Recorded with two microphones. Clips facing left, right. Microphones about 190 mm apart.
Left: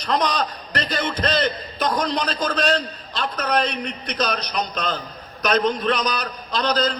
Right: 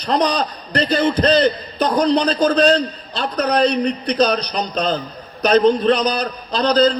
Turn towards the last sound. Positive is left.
turn(degrees=-35)  # may be behind; listen again after turning